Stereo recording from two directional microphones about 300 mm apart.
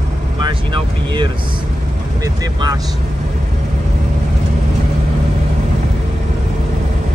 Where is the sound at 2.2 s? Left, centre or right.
Centre.